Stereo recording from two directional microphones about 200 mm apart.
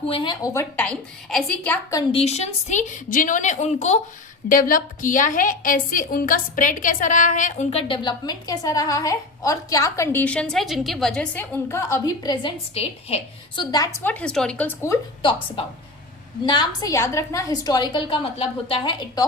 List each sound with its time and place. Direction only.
0.1 s a woman's voice: 25° left (ahead or behind)
0.8 s a woman's voice: 5° left (ahead or behind)
2.0 s a woman's voice: 30° left (ahead or behind); by 14.9 s 10° left (ahead or behind)
15.2 s a woman's voice: 25° left (ahead or behind)